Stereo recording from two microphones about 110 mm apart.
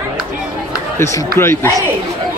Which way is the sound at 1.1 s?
25° left (ahead or behind).